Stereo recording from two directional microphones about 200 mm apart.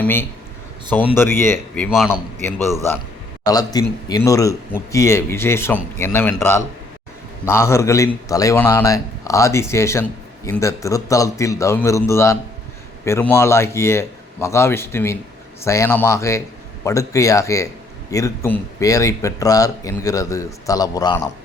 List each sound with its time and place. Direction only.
0.0 s a man's voice: 10° left (ahead or behind)
2.6 s a man's voice: 15° right (ahead or behind)
3.4 s a man's voice: 20° left (ahead or behind)